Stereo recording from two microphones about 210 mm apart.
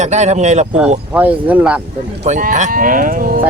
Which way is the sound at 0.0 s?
35° right (ahead or behind).